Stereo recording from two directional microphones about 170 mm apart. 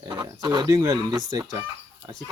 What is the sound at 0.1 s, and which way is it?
Speech, 25° right (ahead or behind).